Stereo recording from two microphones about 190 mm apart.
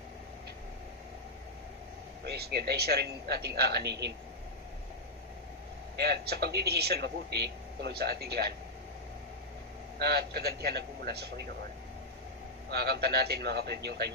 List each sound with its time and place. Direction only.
2.2 s a man's voice: 55° right (ahead or behind)
5.9 s a man's voice: 60° right (ahead or behind)
9.9 s a man's voice: 55° right (ahead or behind)
12.6 s a man's voice: 60° right (ahead or behind)